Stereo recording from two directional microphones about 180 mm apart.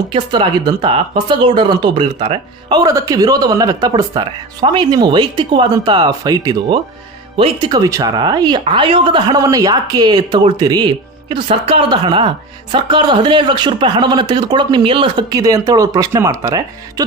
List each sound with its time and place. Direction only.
0.1 s speech: 25° right (ahead or behind)
11.9 s speech: 25° right (ahead or behind)